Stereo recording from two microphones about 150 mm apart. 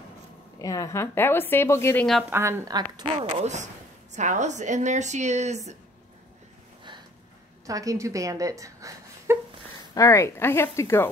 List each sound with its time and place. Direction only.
0.6 s a woman's voice: 25° left (ahead or behind)
2.3 s speech: 15° right (ahead or behind)
2.7 s speech: 30° right (ahead or behind)
3.2 s a woman's voice: 50° right (ahead or behind)
7.6 s a woman's voice: 20° right (ahead or behind)
9.9 s a woman's voice: 20° left (ahead or behind)